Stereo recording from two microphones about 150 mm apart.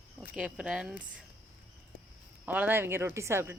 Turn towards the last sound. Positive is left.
turn(degrees=-20)  # may be behind; listen again after turning